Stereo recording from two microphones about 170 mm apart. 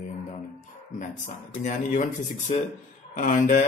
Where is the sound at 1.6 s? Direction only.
45° left (ahead or behind).